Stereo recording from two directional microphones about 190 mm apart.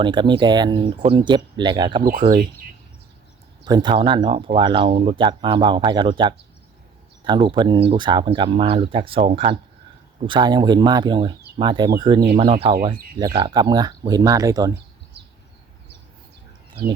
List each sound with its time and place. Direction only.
0.0 s speech: 25° right (ahead or behind)
3.6 s speech: 25° right (ahead or behind)